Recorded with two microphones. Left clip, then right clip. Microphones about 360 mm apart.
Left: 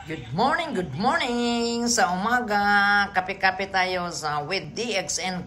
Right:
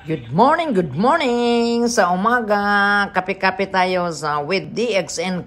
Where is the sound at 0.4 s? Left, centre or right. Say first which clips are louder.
Right 8 dB; centre.